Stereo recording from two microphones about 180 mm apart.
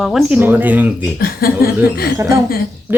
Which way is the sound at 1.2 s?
55° left (ahead or behind).